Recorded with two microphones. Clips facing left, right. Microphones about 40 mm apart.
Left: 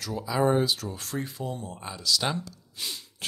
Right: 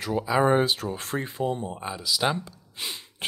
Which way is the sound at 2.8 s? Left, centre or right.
Right.